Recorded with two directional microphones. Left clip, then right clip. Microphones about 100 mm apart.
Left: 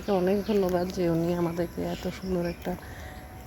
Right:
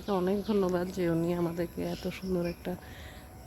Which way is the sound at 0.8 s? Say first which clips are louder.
Left 4 dB; 30° right (ahead or behind).